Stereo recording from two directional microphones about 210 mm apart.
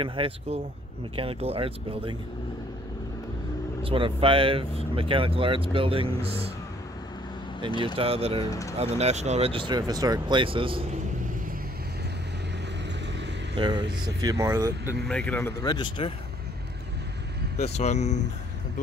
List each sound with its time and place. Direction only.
0.0 s speech: 25° right (ahead or behind)
3.8 s speech: 25° right (ahead or behind)
7.8 s speech: 25° right (ahead or behind)
8.5 s speech: 15° left (ahead or behind)
8.7 s speech: 30° right (ahead or behind)
13.6 s speech: 20° right (ahead or behind)
15.0 s speech: 5° left (ahead or behind)
15.6 s speech: 20° left (ahead or behind)
17.6 s speech: 30° left (ahead or behind)